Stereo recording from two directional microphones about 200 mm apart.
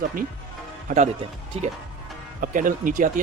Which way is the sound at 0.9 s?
40° right (ahead or behind).